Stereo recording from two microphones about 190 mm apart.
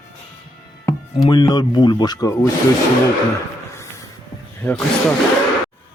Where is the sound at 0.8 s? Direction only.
20° left (ahead or behind).